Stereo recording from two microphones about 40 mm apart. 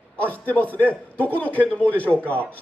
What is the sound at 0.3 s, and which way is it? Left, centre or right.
A man's voice, left.